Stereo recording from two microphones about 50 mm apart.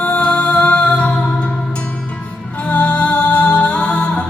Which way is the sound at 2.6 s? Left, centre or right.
Left.